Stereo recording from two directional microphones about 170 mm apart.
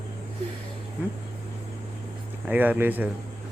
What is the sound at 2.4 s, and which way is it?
Speech, 10° right (ahead or behind).